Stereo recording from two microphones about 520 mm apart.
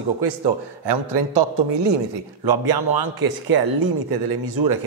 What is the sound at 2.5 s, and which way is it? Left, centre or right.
A man's voice, right.